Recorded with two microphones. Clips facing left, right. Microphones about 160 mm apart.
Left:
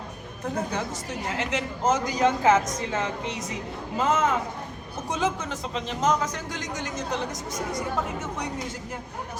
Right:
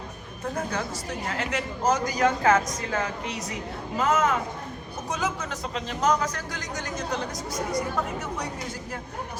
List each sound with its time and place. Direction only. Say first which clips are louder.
0.5 s a woman's voice: left 1 dB; 20° left (ahead or behind)